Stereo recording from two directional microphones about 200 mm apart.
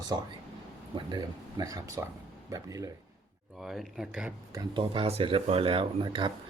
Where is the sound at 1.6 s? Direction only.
15° right (ahead or behind).